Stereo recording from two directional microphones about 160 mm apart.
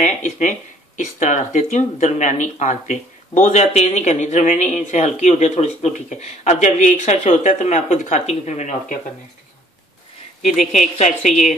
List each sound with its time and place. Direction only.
0.0 s speech: 50° left (ahead or behind)
10.4 s speech: 45° left (ahead or behind)